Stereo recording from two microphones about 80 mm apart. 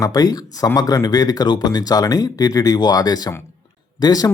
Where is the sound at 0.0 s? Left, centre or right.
Left.